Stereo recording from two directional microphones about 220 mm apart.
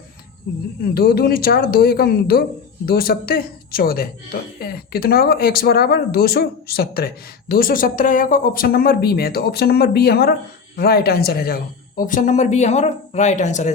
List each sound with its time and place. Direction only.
0.9 s a woman's voice: 45° left (ahead or behind)